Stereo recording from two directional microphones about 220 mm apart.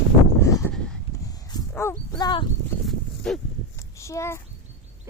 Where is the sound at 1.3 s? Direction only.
15° left (ahead or behind).